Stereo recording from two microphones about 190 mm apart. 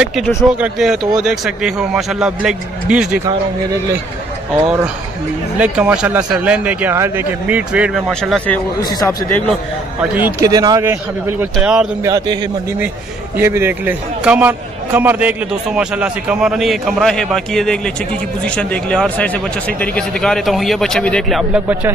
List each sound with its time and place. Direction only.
0.0 s a man's voice: centre (ahead or behind)
5.6 s speech: 5° right (ahead or behind)
8.7 s speech: 15° left (ahead or behind)
9.5 s a man's voice: 10° right (ahead or behind)
13.4 s a man's voice: 10° right (ahead or behind)